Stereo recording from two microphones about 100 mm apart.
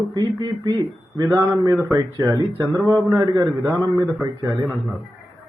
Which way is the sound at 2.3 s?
35° right (ahead or behind).